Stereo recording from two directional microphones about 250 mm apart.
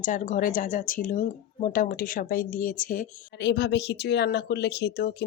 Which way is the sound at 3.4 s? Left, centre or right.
Left.